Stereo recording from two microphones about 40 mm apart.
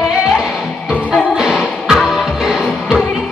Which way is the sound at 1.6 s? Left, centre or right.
Centre.